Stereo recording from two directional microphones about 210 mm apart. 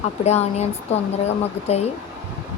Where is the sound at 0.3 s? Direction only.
30° left (ahead or behind).